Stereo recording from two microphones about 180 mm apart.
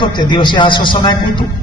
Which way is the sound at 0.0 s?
25° left (ahead or behind).